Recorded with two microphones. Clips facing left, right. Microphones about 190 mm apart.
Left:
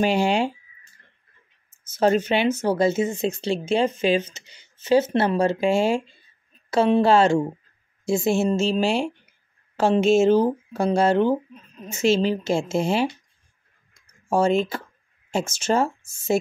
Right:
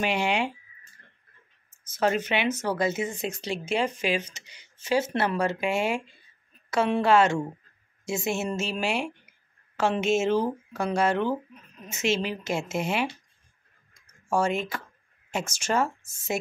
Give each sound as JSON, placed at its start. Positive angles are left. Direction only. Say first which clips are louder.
{"t": 0.0, "sound": "speech", "louder": "left 6 dB", "side_deg": 35}
{"t": 2.0, "sound": "speech", "louder": "left 6 dB", "side_deg": 30}
{"t": 14.3, "sound": "speech", "louder": "left 6 dB", "side_deg": 30}